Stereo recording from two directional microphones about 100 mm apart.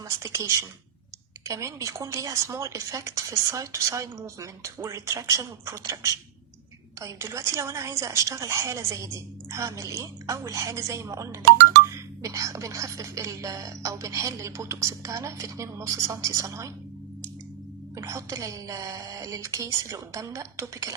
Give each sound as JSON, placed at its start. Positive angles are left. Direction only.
{"t": 0.2, "sound": "speech", "side_deg": -30}
{"t": 17.9, "sound": "speech", "side_deg": -30}